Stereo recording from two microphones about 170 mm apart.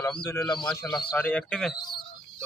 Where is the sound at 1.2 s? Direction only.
10° left (ahead or behind).